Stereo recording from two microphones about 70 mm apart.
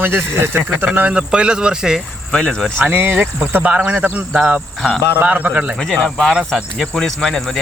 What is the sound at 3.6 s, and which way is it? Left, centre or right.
Speech, centre.